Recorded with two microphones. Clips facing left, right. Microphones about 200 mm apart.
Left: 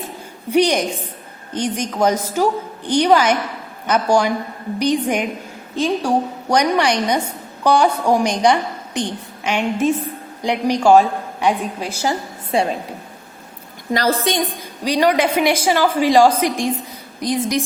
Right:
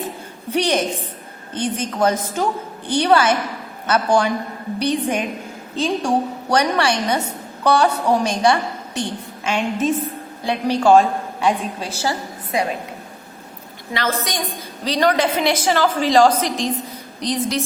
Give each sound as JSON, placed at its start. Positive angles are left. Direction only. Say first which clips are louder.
{"t": 0.5, "sound": "a woman's voice", "louder": "left 3 dB", "side_deg": 15}
{"t": 12.5, "sound": "a woman's voice", "louder": "left 3 dB", "side_deg": 30}
{"t": 13.9, "sound": "a woman's voice", "louder": "left 5 dB", "side_deg": 35}
{"t": 14.8, "sound": "a woman's voice", "louder": "left 2 dB", "side_deg": 10}